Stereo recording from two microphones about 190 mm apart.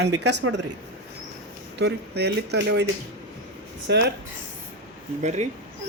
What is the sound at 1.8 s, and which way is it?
Speech, 60° right (ahead or behind).